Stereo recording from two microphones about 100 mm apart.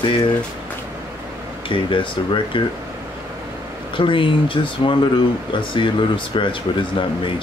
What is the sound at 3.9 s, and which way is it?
Speech, 55° left (ahead or behind).